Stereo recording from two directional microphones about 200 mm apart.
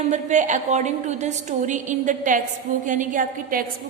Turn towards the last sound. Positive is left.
turn(degrees=-45)  # may be behind; listen again after turning